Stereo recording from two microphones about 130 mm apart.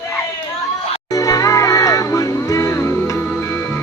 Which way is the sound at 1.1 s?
25° left (ahead or behind).